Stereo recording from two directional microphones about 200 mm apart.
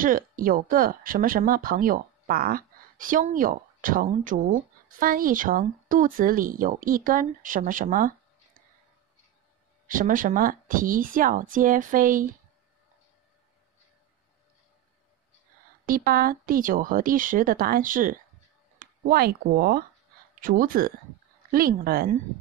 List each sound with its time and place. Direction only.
0.0 s speech: 45° right (ahead or behind)
9.8 s speech: 40° right (ahead or behind)
15.8 s speech: 45° right (ahead or behind)